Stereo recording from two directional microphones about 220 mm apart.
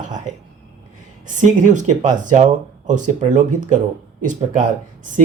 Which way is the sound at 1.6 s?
35° right (ahead or behind).